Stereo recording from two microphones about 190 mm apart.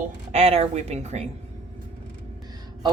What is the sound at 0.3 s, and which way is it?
Speech, 35° right (ahead or behind).